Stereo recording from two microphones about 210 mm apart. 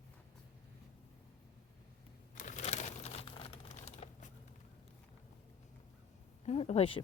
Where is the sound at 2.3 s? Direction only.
35° left (ahead or behind).